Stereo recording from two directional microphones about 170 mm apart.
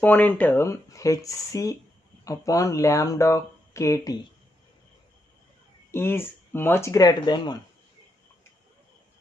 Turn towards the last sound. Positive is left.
turn(degrees=25)  # may be behind; listen again after turning